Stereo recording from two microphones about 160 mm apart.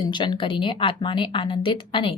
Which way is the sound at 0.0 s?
30° left (ahead or behind).